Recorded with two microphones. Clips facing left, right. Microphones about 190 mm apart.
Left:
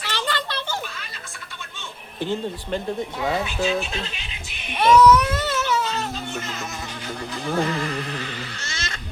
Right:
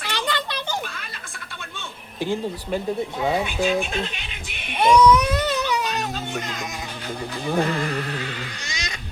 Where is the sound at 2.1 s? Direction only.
10° right (ahead or behind).